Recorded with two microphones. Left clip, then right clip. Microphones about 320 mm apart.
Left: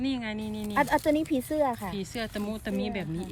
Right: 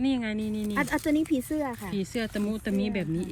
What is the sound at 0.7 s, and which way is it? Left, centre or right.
A woman's voice, left.